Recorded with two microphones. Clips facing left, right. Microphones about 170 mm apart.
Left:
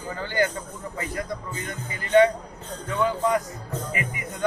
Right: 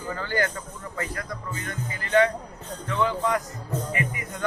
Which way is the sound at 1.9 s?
25° left (ahead or behind).